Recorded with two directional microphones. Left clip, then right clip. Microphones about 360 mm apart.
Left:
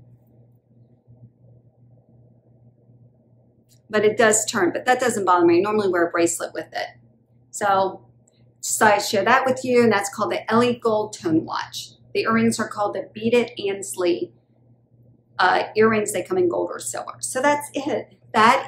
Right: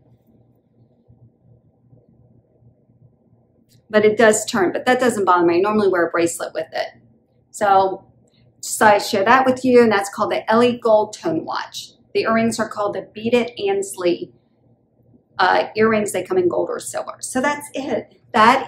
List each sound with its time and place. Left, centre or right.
3.9 s a woman's voice: centre
15.3 s a woman's voice: centre